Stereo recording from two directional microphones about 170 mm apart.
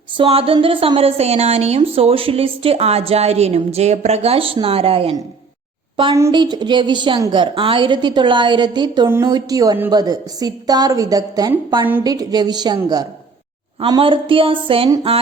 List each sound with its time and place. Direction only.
0.2 s a woman's voice: 35° right (ahead or behind)
6.3 s a woman's voice: 25° right (ahead or behind)
9.0 s a woman's voice: 15° right (ahead or behind); by 14.8 s 30° right (ahead or behind)